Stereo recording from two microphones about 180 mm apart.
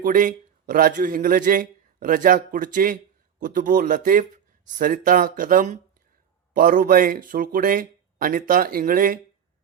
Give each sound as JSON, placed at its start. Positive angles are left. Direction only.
{"t": 0.0, "sound": "a man's voice", "side_deg": -50}